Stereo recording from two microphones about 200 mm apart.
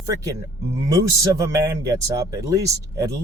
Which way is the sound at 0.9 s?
15° right (ahead or behind).